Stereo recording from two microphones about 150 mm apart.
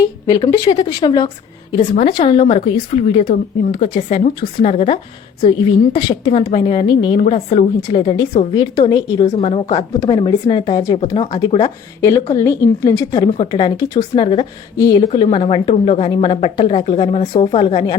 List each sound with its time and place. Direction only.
0.0 s speech: 25° left (ahead or behind); by 7.6 s 40° left (ahead or behind)
7.8 s speech: 25° left (ahead or behind)
9.2 s speech: 45° left (ahead or behind)
10.1 s speech: 30° left (ahead or behind)